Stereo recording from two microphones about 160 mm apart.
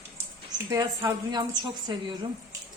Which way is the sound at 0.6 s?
20° right (ahead or behind).